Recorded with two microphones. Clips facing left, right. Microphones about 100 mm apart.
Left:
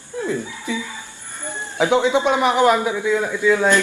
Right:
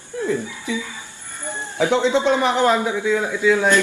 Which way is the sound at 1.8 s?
15° left (ahead or behind).